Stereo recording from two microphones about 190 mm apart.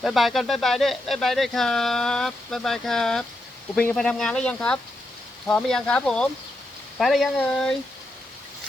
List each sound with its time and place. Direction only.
0.0 s speech: centre (ahead or behind)